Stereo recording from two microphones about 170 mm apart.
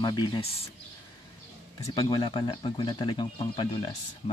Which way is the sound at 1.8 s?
25° left (ahead or behind).